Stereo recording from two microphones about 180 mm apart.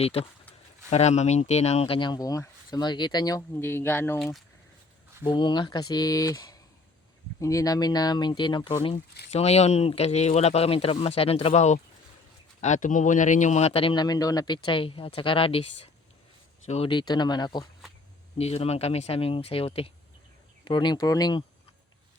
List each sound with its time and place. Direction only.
0.0 s speech: 35° left (ahead or behind); by 4.2 s 15° left (ahead or behind)
5.3 s speech: 25° left (ahead or behind)
18.3 s speech: 35° left (ahead or behind)